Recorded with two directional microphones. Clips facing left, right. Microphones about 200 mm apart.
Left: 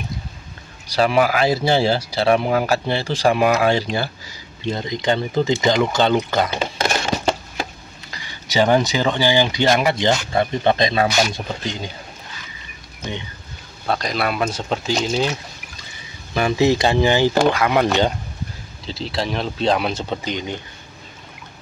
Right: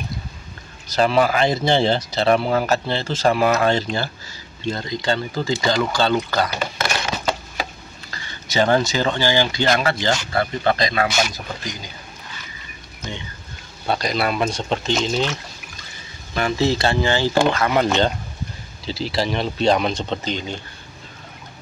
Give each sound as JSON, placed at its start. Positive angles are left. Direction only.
{"t": 0.9, "sound": "speech", "side_deg": 10}
{"t": 8.1, "sound": "speech", "side_deg": 15}
{"t": 13.8, "sound": "speech", "side_deg": 0}
{"t": 16.3, "sound": "speech", "side_deg": 15}
{"t": 18.9, "sound": "speech", "side_deg": 0}